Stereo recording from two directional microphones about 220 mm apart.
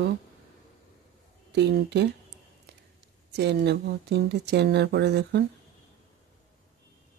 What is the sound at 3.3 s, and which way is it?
Speech, 50° right (ahead or behind).